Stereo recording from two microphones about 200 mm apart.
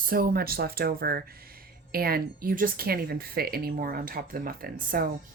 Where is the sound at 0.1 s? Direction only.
45° right (ahead or behind).